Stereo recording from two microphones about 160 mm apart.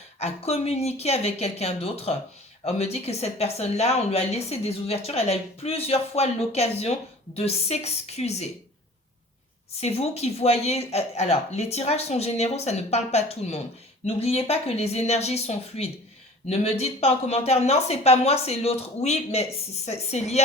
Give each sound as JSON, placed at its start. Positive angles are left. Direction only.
{"t": 0.2, "sound": "speech", "side_deg": 40}
{"t": 9.8, "sound": "speech", "side_deg": 40}